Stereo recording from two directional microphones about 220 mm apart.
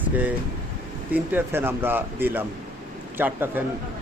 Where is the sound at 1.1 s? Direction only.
10° right (ahead or behind).